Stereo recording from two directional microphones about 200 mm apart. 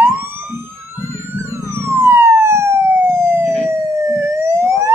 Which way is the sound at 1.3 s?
10° right (ahead or behind).